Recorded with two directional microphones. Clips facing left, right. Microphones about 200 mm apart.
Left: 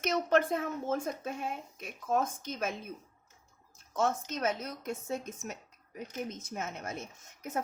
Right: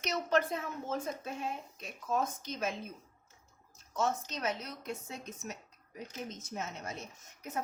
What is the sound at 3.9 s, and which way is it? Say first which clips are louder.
A woman's voice: left 3 dB; 50° left (ahead or behind).